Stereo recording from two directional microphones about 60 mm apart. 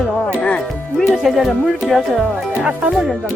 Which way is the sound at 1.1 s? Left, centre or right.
Centre.